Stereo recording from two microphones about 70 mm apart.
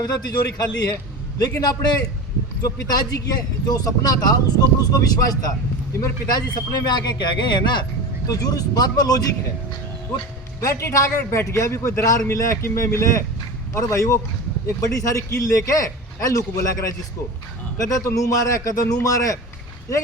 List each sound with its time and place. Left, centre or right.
0.0 s speech: left
2.6 s speech: left
6.3 s speech: left
8.3 s speech: left
10.6 s a man's voice: left
17.8 s a man's voice: left